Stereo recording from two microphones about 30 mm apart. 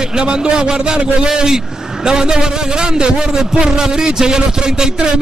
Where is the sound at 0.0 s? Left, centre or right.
Right.